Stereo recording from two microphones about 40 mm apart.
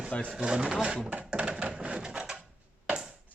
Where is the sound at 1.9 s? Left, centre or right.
Centre.